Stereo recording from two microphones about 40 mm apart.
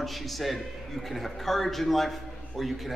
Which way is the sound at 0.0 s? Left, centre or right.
Centre.